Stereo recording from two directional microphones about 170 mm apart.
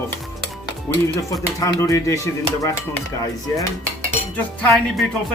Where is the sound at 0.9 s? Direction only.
15° left (ahead or behind).